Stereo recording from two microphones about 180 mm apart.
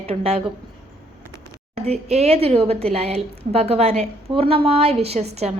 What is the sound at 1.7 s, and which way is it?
A woman's voice, 35° right (ahead or behind).